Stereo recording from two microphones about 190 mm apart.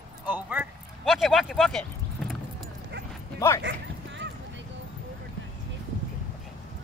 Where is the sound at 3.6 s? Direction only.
70° right (ahead or behind).